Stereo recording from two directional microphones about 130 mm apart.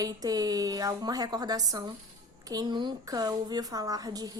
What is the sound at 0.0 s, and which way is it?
A woman's voice, 30° right (ahead or behind).